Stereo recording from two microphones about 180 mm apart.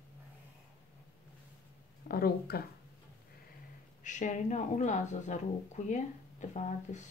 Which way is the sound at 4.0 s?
45° left (ahead or behind).